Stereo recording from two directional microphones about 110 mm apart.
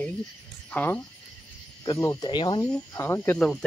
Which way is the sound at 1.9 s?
30° left (ahead or behind).